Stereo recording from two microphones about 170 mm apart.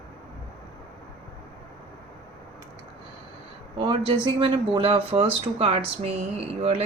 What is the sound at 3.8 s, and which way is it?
Speech, 30° right (ahead or behind).